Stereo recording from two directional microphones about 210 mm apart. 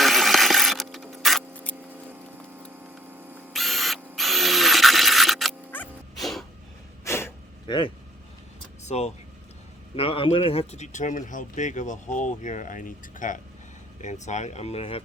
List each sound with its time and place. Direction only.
0.0 s a sound: centre (ahead or behind)
1.9 s patter: 10° right (ahead or behind)
2.9 s camera: 10° right (ahead or behind)
3.5 s a sound: centre (ahead or behind)
7.0 s gasp: 10° left (ahead or behind)
8.8 s speech: 30° left (ahead or behind)